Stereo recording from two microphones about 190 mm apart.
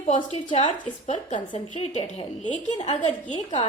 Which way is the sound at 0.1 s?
40° left (ahead or behind).